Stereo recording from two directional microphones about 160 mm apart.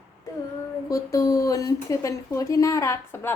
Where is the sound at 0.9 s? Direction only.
20° left (ahead or behind).